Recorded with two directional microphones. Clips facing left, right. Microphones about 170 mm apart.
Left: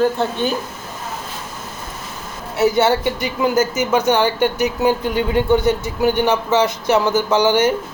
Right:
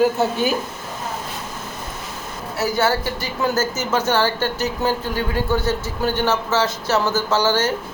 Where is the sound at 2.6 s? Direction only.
20° left (ahead or behind).